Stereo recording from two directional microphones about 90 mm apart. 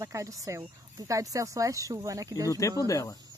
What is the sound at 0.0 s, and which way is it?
Speech, 35° right (ahead or behind).